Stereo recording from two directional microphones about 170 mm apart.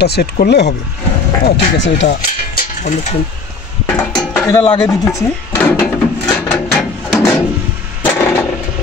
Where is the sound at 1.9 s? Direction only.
80° left.